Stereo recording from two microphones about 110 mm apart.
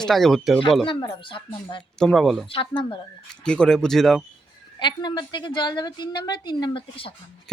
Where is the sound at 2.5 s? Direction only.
50° left (ahead or behind).